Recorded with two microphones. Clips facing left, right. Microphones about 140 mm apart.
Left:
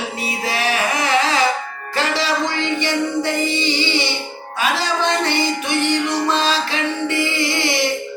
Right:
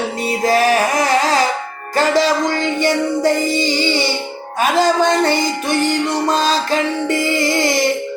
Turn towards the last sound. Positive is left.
turn(degrees=-40)  # may be behind; listen again after turning